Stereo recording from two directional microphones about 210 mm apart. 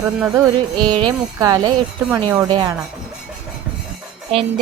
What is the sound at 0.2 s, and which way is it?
Music, 15° right (ahead or behind).